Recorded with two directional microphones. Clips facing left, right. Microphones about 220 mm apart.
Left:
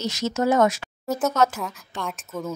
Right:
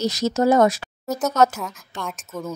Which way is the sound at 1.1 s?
Centre (ahead or behind).